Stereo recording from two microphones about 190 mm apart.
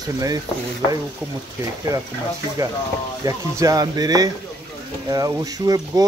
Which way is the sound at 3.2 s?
20° right (ahead or behind).